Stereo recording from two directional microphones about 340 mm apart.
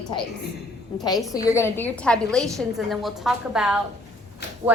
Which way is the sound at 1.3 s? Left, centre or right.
Centre.